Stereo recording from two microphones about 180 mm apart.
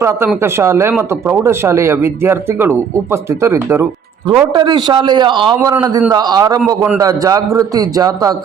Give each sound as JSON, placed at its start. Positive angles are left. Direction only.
{"t": 0.0, "sound": "speech", "side_deg": -15}
{"t": 4.5, "sound": "a man's voice", "side_deg": -25}
{"t": 5.5, "sound": "a man's voice", "side_deg": -15}